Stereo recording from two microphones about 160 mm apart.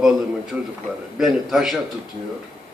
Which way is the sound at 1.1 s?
Centre (ahead or behind).